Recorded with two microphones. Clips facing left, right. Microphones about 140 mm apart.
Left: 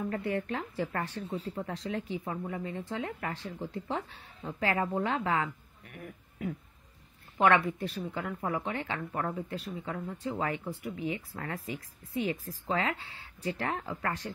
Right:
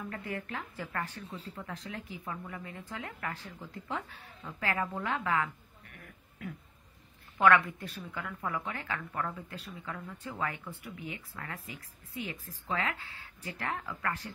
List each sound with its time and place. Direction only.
0.1 s speech: 30° left (ahead or behind)